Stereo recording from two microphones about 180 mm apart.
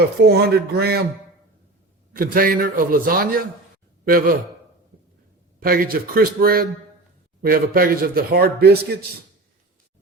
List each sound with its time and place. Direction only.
0.2 s a man's voice: 60° right (ahead or behind)
2.1 s a man's voice: 55° right (ahead or behind)
5.5 s a man's voice: 55° right (ahead or behind)